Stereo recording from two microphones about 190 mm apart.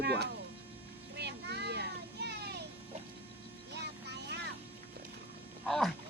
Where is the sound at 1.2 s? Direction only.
60° right (ahead or behind).